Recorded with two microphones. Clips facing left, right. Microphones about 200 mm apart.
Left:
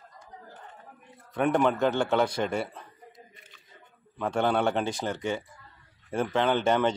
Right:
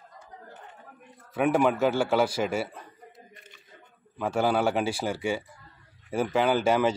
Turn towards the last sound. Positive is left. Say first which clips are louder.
# right 1 dB
turn(degrees=-5)  # may be behind; listen again after turning